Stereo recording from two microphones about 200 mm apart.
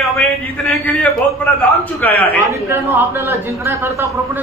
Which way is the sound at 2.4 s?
10° right (ahead or behind).